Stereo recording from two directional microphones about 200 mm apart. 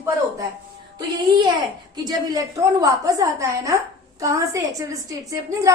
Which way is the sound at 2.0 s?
15° right (ahead or behind).